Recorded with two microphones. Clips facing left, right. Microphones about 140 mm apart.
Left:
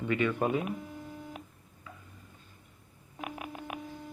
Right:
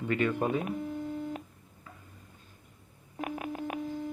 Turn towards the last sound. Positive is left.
turn(degrees=-45)  # may be behind; listen again after turning